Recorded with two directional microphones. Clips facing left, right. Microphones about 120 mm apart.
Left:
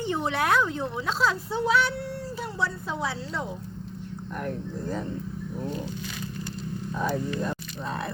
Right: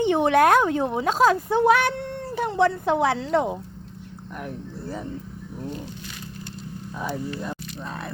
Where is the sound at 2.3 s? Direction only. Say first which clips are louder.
Right 12 dB; 60° right (ahead or behind).